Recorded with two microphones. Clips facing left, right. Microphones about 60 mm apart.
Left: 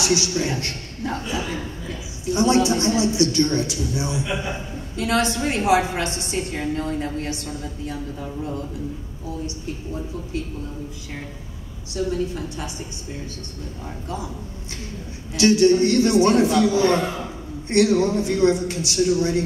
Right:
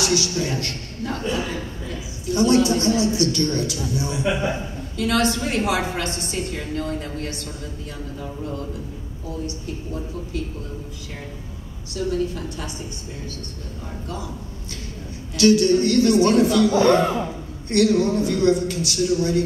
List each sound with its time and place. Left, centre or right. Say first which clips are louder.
0.0 s a man's voice: left 1 dB; left
2.2 s a man's voice: right 1 dB; left
12.0 s a woman's voice: left 1 dB; left
15.3 s a man's voice: even; left
16.7 s speech: right 3 dB; right
17.6 s a man's voice: even; left